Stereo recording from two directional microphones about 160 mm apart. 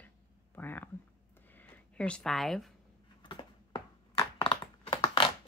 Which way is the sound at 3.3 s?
30° left (ahead or behind).